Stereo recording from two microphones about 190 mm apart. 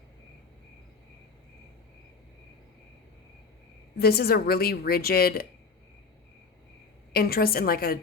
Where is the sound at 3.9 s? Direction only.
55° left (ahead or behind).